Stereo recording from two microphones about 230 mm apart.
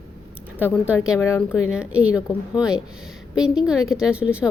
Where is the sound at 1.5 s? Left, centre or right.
Centre.